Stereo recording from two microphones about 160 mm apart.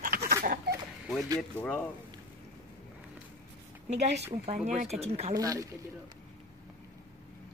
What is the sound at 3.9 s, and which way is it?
A woman's voice, 40° right (ahead or behind).